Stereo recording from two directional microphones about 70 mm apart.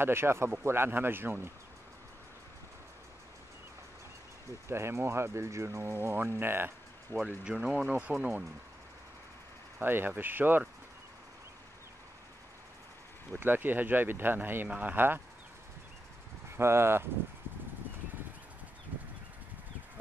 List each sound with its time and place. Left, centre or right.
0.0 s speech: right
4.6 s speech: right
7.1 s speech: left
7.4 s speech: centre
9.8 s speech: right
13.3 s speech: right
16.4 s speech: right